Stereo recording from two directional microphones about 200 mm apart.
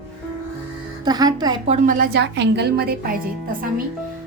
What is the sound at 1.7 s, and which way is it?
A woman's voice, 40° right (ahead or behind).